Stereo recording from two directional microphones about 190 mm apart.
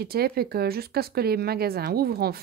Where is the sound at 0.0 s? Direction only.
55° right (ahead or behind).